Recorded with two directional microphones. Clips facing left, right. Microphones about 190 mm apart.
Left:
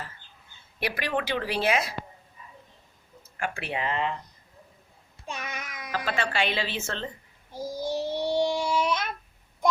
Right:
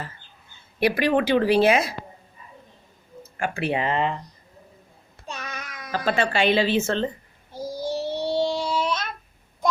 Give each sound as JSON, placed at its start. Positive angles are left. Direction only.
{"t": 0.8, "sound": "speech", "side_deg": -25}
{"t": 3.3, "sound": "speech", "side_deg": -30}
{"t": 5.2, "sound": "child singing", "side_deg": 15}
{"t": 6.1, "sound": "speech", "side_deg": -25}
{"t": 7.9, "sound": "child singing", "side_deg": 15}